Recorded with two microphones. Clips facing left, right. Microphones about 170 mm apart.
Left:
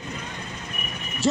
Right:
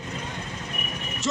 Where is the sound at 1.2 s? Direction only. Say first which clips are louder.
Left 5 dB; 35° left (ahead or behind).